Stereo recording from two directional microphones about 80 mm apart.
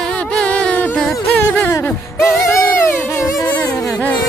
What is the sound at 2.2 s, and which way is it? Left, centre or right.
Music, left.